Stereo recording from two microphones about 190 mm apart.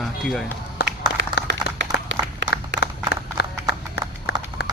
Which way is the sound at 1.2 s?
70° right (ahead or behind).